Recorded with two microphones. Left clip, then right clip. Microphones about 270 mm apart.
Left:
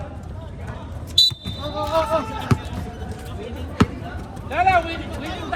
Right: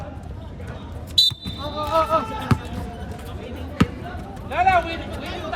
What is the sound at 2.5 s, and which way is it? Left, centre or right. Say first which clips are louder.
Basketball bounce: even; centre.